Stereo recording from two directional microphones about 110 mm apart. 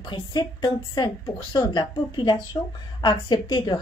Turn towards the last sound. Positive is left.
turn(degrees=40)  # may be behind; listen again after turning